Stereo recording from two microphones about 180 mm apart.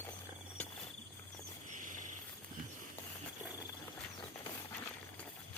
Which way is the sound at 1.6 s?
45° right (ahead or behind).